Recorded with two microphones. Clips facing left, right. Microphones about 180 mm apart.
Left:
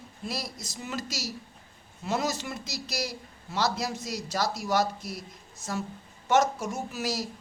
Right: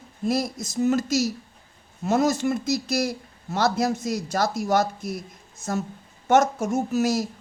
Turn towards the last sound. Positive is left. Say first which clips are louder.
# right 10 dB
turn(degrees=-45)  # may be behind; listen again after turning